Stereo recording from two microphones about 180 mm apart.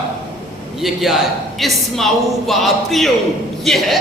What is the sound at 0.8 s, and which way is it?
A man's voice, centre (ahead or behind).